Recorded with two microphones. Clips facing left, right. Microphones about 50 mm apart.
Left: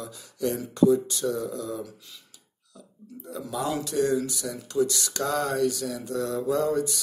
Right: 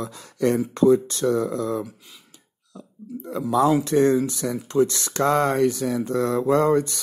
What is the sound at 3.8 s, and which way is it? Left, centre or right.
Speech, right.